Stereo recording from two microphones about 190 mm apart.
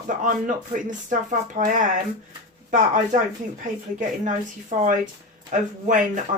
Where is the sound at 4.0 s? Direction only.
40° right (ahead or behind).